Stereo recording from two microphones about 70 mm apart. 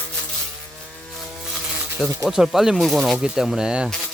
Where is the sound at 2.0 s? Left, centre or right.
Centre.